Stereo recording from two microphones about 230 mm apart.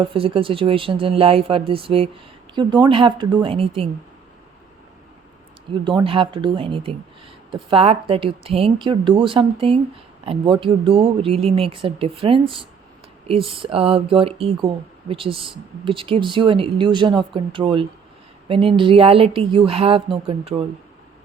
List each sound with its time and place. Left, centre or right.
0.0 s speech: right
5.8 s speech: right